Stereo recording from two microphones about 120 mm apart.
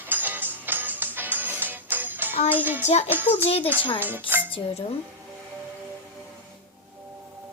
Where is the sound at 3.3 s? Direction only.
55° left (ahead or behind).